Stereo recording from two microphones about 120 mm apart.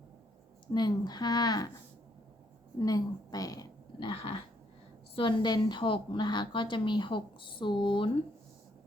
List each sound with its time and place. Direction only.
0.7 s a woman's voice: 35° left (ahead or behind)
2.7 s a woman's voice: 30° left (ahead or behind)
4.1 s a sound: 45° left (ahead or behind)
5.1 s a woman's voice: 40° left (ahead or behind)